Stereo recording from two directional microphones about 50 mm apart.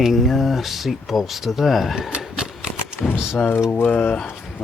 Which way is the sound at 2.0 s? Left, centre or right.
Centre.